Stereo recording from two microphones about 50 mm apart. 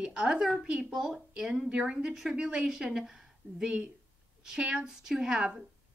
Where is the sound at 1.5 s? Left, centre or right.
Right.